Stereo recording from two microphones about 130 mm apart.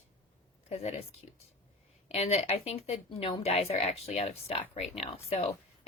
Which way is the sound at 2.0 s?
50° left (ahead or behind).